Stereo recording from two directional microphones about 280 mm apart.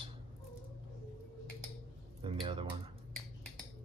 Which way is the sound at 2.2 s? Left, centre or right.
Centre.